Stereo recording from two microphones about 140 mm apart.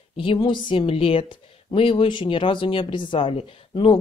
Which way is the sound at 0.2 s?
35° left (ahead or behind).